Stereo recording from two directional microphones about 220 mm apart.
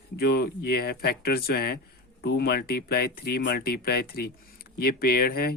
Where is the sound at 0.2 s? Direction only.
45° left (ahead or behind).